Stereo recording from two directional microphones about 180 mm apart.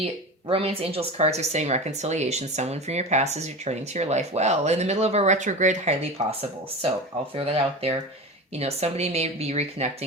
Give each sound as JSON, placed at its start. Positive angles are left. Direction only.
{"t": 0.0, "sound": "speech", "side_deg": -30}
{"t": 7.3, "sound": "speech", "side_deg": -35}